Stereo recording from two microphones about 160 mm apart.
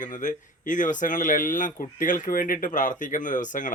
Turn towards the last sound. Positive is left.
turn(degrees=55)  # may be behind; listen again after turning